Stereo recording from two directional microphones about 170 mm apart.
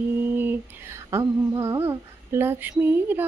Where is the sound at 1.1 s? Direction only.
15° right (ahead or behind).